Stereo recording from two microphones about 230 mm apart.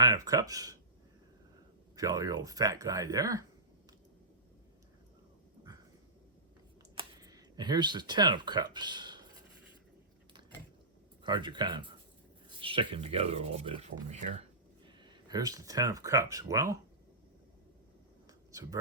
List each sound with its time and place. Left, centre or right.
0.0 s speech: centre
2.0 s speech: centre
6.9 s speech: centre
11.2 s speech: centre
15.0 s speech: centre
18.3 s a sound: centre